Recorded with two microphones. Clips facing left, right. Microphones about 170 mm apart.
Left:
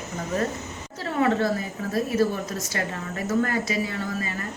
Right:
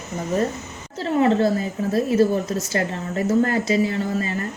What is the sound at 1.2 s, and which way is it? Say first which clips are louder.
Speech: right 4 dB; 30° right (ahead or behind).